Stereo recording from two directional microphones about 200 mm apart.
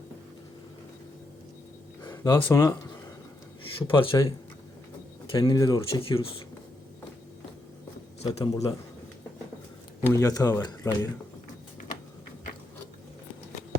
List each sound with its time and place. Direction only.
2.0 s a sound: 10° left (ahead or behind)
2.3 s speech: 15° left (ahead or behind)
3.8 s speech: 25° left (ahead or behind)
5.3 s speech: 20° left (ahead or behind)
5.9 s speech: 30° left (ahead or behind)
8.2 s a man's voice: 30° left (ahead or behind)
10.0 s speech: 15° left (ahead or behind)